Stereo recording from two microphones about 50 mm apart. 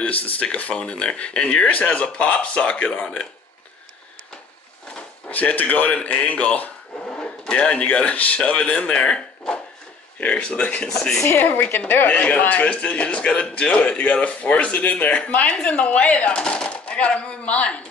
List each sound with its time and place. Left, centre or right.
0.0 s speech: left
5.3 s speech: left
7.1 s speech: centre
10.2 s speech: left
10.9 s a woman's voice: centre
11.3 s speech: left
12.1 s speech: left